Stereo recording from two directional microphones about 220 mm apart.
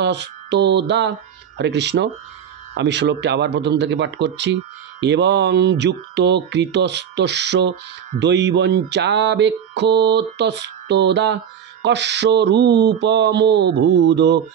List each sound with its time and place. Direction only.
0.0 s mantra: 50° right (ahead or behind)